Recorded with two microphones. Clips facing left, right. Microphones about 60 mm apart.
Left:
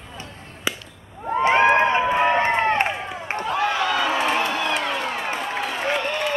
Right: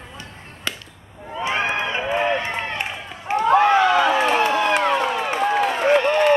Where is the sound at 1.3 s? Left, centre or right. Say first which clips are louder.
Left 7 dB; left.